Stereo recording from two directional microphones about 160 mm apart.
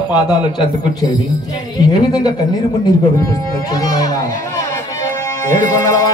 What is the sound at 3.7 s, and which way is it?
Speech, 25° left (ahead or behind).